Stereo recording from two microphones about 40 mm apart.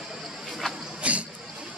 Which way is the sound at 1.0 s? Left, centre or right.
Right.